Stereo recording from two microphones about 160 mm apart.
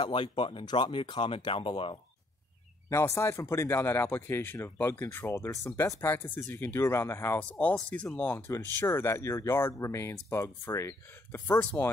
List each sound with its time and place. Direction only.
0.0 s speech: 30° left (ahead or behind)
2.9 s speech: 15° left (ahead or behind)